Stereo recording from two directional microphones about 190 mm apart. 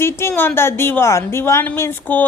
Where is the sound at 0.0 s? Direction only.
15° left (ahead or behind).